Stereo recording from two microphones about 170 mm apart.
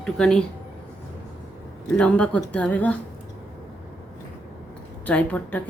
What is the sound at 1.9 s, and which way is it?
Speech, 5° left (ahead or behind).